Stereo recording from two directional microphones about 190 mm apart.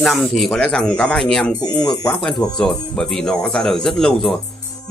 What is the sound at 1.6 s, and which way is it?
Speech, 20° left (ahead or behind).